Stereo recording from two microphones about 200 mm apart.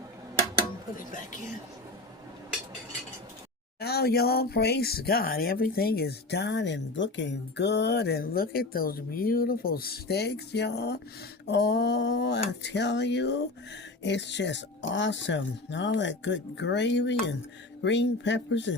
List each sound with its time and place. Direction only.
0.9 s speech: 40° left (ahead or behind)
3.8 s speech: 50° left (ahead or behind)